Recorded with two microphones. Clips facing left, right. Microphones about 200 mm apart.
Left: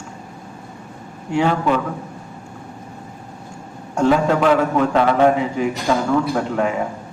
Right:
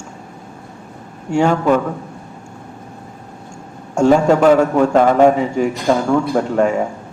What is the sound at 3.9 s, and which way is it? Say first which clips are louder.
A man's voice: right 4 dB; 45° right (ahead or behind).